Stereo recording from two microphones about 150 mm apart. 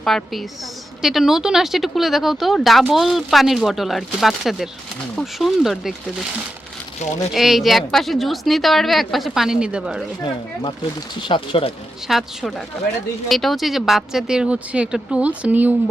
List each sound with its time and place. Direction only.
0.0 s a woman's voice: centre (ahead or behind)
7.0 s speech: 50° left (ahead or behind)
7.3 s a woman's voice: centre (ahead or behind)
11.3 s speech: 35° left (ahead or behind)
12.0 s a woman's voice: centre (ahead or behind)